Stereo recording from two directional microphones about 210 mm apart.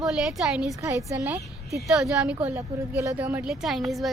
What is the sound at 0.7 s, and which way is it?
A woman's voice, 15° right (ahead or behind).